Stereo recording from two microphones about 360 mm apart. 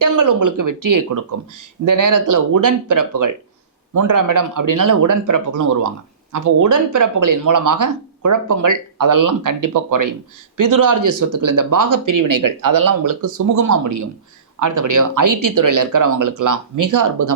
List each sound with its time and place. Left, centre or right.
0.0 s speech: right